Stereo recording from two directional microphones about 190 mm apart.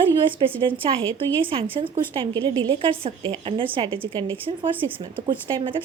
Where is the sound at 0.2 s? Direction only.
25° right (ahead or behind).